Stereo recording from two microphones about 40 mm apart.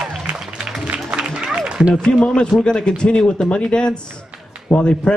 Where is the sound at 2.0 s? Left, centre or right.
Left.